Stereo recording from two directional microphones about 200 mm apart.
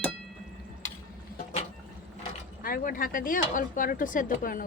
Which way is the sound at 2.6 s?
45° left (ahead or behind).